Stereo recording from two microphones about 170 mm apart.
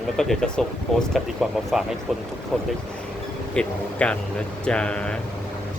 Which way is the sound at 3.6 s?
5° left (ahead or behind).